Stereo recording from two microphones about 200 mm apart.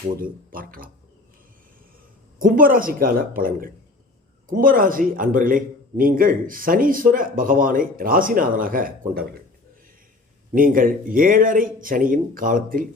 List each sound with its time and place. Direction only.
0.2 s a man's voice: 45° right (ahead or behind)
2.4 s a man's voice: 45° right (ahead or behind)
10.5 s a man's voice: 45° right (ahead or behind)